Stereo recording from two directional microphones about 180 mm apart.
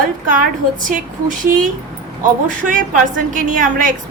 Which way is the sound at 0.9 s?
50° right (ahead or behind).